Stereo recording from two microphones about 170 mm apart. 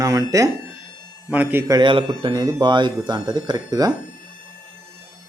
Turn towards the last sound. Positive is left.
turn(degrees=-25)  # may be behind; listen again after turning